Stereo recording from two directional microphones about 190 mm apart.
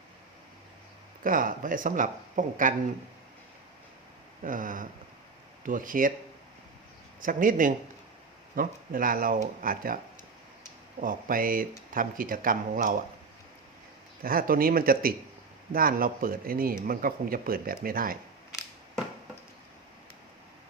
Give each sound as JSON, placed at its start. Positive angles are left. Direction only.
{"t": 1.2, "sound": "speech", "side_deg": -45}
{"t": 4.4, "sound": "speech", "side_deg": -45}
{"t": 7.2, "sound": "speech", "side_deg": -45}
{"t": 11.0, "sound": "speech", "side_deg": -45}
{"t": 14.2, "sound": "speech", "side_deg": -50}